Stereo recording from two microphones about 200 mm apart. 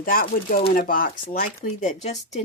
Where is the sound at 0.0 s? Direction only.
45° left (ahead or behind).